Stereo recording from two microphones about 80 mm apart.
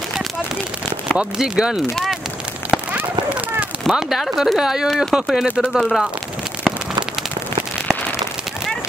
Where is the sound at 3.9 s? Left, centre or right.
Centre.